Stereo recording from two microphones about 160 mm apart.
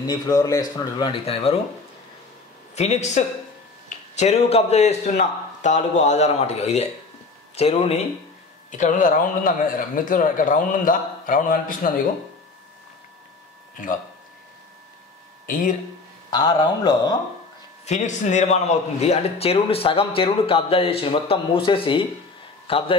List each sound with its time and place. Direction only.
0.0 s speech: 25° left (ahead or behind)
2.7 s a man's voice: 45° left (ahead or behind)
8.7 s speech: 55° left (ahead or behind)
15.4 s speech: 60° left (ahead or behind)
16.3 s speech: 25° left (ahead or behind)
17.8 s a man's voice: 45° left (ahead or behind)